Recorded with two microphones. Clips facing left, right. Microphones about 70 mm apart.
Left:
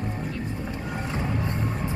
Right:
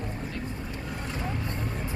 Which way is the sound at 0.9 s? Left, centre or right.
Left.